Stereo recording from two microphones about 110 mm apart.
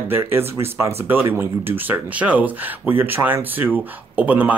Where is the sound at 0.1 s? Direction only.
20° right (ahead or behind).